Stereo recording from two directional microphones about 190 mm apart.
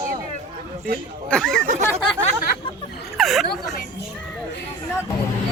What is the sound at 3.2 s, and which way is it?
Speech, centre (ahead or behind).